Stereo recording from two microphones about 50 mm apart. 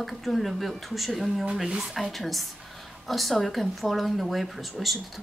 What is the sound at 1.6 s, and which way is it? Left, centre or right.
Speech, centre.